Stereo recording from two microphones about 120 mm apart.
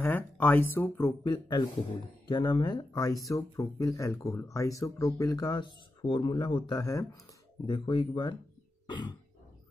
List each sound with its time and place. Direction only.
0.0 s speech: 15° left (ahead or behind)
1.0 s speech: 40° left (ahead or behind)
7.6 s speech: 40° left (ahead or behind)
8.8 s cough: 40° left (ahead or behind)